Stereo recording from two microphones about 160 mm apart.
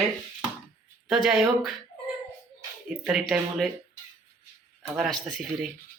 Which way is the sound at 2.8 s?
5° right (ahead or behind).